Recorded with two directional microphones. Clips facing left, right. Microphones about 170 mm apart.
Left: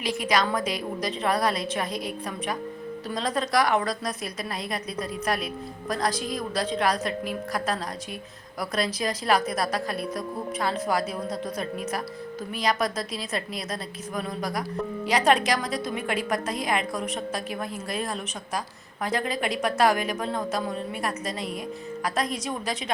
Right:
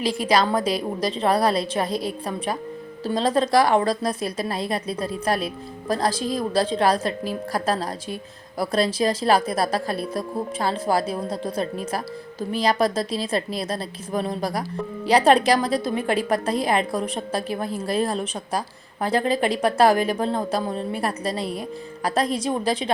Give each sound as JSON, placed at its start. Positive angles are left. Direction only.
{"t": 0.0, "sound": "a woman's voice", "side_deg": -30}